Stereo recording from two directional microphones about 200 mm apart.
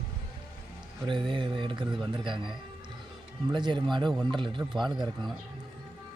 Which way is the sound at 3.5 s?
25° right (ahead or behind).